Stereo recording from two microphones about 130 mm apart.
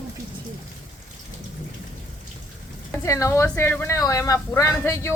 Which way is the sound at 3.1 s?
25° left (ahead or behind).